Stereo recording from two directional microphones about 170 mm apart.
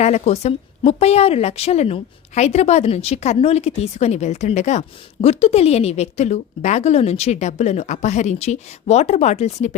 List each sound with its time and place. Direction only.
0.0 s a woman's voice: 40° left (ahead or behind)